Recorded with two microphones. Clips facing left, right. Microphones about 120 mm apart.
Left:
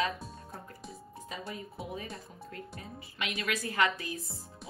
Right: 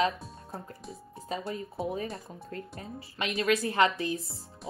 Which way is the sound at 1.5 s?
30° right (ahead or behind).